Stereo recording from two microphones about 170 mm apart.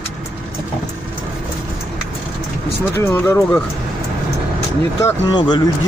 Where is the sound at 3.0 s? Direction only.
15° left (ahead or behind).